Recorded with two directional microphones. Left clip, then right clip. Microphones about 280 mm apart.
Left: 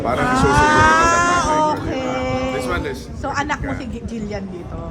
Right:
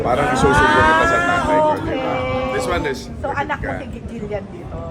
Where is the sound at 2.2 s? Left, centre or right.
Left.